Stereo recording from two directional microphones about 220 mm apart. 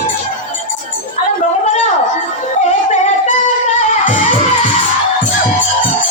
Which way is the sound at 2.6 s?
30° left (ahead or behind).